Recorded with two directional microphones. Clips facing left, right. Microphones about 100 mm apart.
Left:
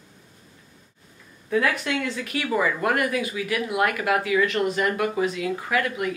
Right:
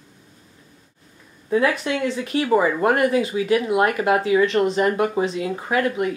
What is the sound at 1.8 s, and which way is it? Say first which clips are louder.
Speech: right 4 dB; 25° right (ahead or behind).